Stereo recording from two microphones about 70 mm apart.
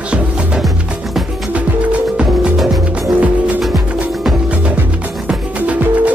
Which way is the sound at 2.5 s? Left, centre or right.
Centre.